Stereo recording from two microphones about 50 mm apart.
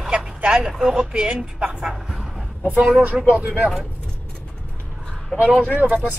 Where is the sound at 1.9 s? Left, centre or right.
Centre.